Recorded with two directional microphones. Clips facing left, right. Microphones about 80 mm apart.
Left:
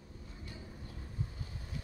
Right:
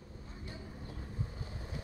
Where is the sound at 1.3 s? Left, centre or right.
Right.